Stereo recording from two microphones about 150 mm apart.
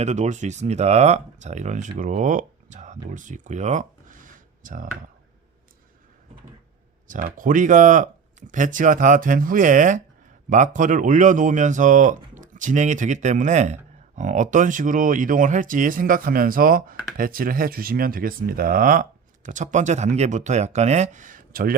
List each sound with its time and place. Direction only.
0.0 s speech: 50° right (ahead or behind)
7.1 s speech: 60° right (ahead or behind)